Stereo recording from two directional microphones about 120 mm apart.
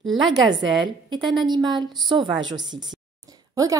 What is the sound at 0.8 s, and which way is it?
A woman's voice, 40° right (ahead or behind).